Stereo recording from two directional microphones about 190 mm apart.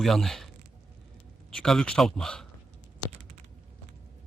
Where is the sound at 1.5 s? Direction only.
Centre (ahead or behind).